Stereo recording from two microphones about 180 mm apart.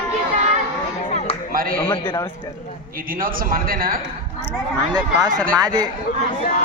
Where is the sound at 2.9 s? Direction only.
50° right (ahead or behind).